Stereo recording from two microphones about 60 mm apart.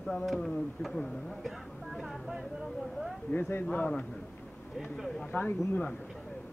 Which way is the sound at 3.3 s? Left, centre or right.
Left.